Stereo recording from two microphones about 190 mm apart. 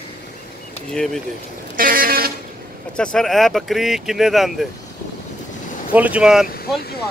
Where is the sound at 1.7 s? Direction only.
50° right (ahead or behind).